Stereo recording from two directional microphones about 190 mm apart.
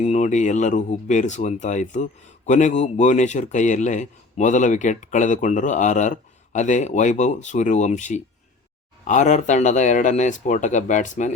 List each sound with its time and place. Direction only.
0.0 s a man's voice: 35° left (ahead or behind)